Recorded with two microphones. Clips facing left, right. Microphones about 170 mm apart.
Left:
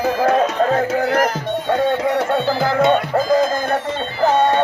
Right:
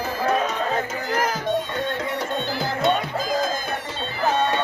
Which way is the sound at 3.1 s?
65° left (ahead or behind).